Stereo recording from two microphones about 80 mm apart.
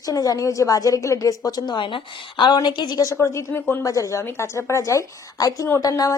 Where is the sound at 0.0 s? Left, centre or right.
Left.